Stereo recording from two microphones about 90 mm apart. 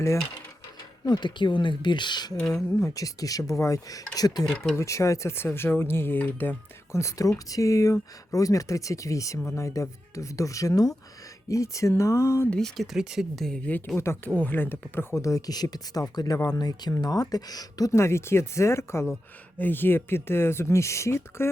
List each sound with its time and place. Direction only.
1.0 s speech: 55° left (ahead or behind)
2.7 s speech: 35° left (ahead or behind); by 6.6 s 20° left (ahead or behind)
6.9 s speech: 35° left (ahead or behind)
12.5 s speech: 5° left (ahead or behind)
13.7 s speech: 20° left (ahead or behind)